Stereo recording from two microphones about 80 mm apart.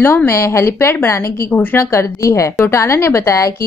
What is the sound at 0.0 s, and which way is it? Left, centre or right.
Speech, left.